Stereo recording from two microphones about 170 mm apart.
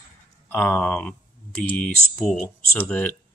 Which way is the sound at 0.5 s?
10° left (ahead or behind).